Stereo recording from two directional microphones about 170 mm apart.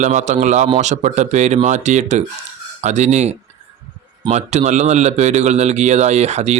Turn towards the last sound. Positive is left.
turn(degrees=-40)  # may be behind; listen again after turning